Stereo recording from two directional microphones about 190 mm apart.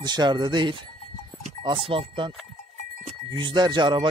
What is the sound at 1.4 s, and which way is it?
Livestock, 25° right (ahead or behind).